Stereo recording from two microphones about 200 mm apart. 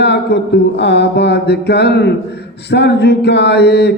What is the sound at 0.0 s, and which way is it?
Mantra, 55° left (ahead or behind).